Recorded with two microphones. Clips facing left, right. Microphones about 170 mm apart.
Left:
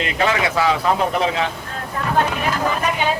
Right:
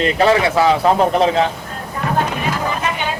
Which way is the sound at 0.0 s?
35° right (ahead or behind).